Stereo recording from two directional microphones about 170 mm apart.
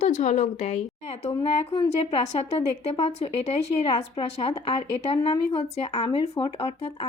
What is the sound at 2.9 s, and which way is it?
A woman's voice, 35° left (ahead or behind).